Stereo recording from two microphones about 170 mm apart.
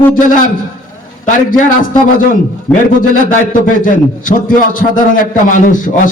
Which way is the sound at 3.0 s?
50° left (ahead or behind).